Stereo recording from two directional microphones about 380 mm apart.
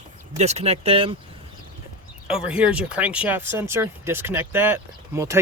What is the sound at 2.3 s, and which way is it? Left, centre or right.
Speech, centre.